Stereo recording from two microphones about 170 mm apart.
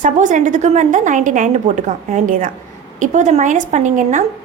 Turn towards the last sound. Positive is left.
turn(degrees=-45)  # may be behind; listen again after turning